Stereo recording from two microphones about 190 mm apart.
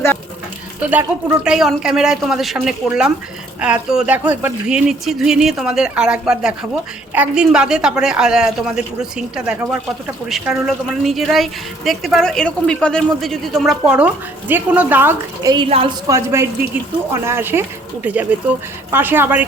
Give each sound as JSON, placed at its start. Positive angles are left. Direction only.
{"t": 0.8, "sound": "a woman's voice", "side_deg": -10}
{"t": 16.0, "sound": "speech", "side_deg": -15}